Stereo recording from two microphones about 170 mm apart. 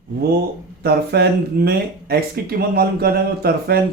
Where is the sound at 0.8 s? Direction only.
70° right (ahead or behind).